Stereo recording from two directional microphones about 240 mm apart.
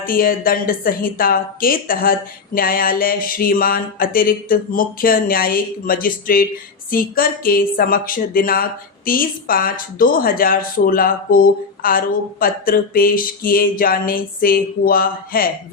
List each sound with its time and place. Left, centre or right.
0.0 s speech: left